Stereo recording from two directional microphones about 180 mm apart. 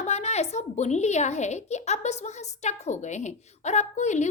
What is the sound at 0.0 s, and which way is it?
A woman's voice, 40° left (ahead or behind).